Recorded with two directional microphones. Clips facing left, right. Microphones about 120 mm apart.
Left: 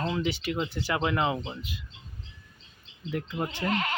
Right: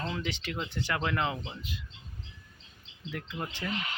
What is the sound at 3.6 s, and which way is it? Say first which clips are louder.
Speech: left 8 dB; 85° left.